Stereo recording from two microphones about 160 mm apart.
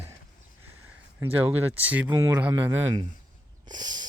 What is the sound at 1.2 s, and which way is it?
Speech, 10° right (ahead or behind).